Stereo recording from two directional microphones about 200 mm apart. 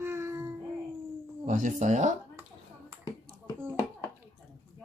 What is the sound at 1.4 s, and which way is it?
Speech, 40° right (ahead or behind).